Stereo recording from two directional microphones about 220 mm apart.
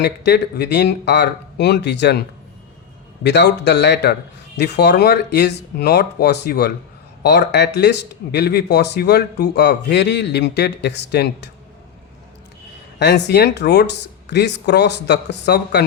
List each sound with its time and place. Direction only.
0.0 s speech: 50° left (ahead or behind)
3.2 s speech: 50° left (ahead or behind)
13.0 s speech: 50° left (ahead or behind)